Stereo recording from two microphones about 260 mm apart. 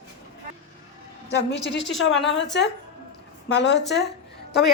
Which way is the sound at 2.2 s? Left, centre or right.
Left.